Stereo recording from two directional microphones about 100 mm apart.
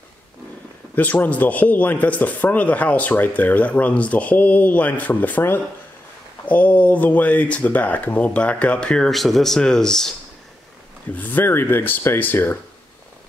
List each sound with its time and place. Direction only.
0.9 s speech: 15° left (ahead or behind)
11.1 s speech: 20° left (ahead or behind)